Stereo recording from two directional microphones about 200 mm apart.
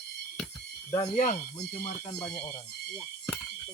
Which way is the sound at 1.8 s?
35° left (ahead or behind).